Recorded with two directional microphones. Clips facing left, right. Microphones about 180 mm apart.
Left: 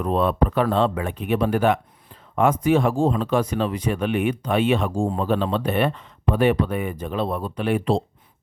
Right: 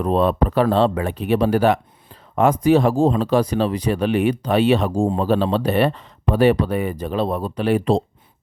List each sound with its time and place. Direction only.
0.0 s speech: 35° right (ahead or behind)